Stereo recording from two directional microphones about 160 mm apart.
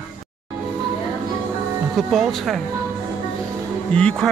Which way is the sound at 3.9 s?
5° left (ahead or behind).